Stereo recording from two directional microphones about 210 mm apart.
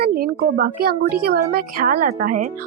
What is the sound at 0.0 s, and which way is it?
Speech, 45° right (ahead or behind).